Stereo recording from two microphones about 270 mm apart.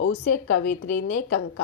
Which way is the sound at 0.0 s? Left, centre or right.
Left.